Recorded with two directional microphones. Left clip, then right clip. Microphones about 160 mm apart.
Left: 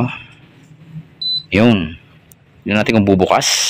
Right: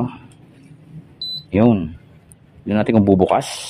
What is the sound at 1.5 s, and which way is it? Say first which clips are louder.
Speech: left 2 dB; 5° right (ahead or behind).